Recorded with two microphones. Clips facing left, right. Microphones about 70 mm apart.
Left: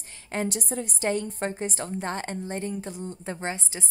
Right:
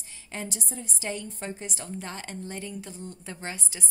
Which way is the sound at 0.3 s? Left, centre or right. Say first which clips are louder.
Left 8 dB; left.